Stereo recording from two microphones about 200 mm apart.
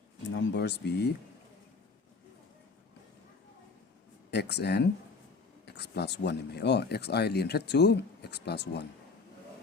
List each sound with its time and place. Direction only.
0.3 s speech: 60° left (ahead or behind)
4.3 s speech: 55° left (ahead or behind)